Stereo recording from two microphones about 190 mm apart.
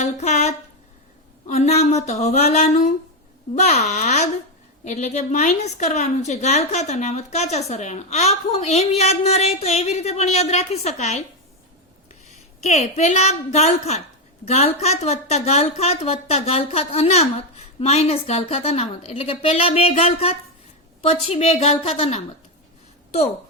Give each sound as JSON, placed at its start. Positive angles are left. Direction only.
{"t": 0.0, "sound": "a sound", "side_deg": 35}
{"t": 1.5, "sound": "a woman's voice", "side_deg": 35}
{"t": 12.6, "sound": "a woman's voice", "side_deg": 35}